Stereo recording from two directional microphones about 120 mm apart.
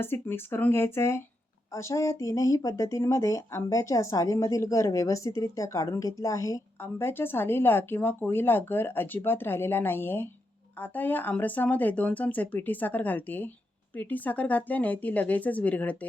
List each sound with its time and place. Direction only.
0.0 s speech: 20° left (ahead or behind)